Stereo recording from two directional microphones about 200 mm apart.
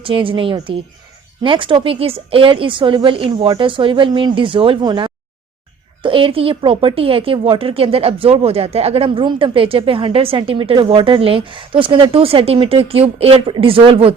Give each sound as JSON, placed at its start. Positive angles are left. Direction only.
{"t": 0.0, "sound": "a woman's voice", "side_deg": -25}